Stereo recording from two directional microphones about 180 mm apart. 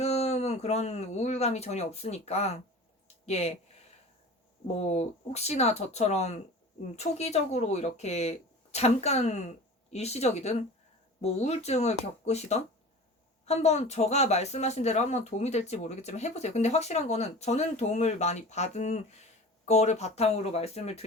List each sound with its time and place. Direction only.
0.0 s speech: 35° left (ahead or behind)
4.7 s speech: 40° left (ahead or behind)